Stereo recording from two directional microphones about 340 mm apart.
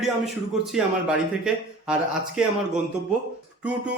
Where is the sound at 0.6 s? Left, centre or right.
Centre.